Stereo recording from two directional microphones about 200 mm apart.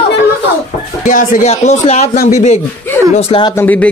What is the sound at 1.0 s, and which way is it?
Speech, 40° left (ahead or behind).